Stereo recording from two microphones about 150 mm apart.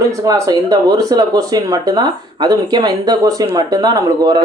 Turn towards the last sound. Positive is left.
turn(degrees=-25)  # may be behind; listen again after turning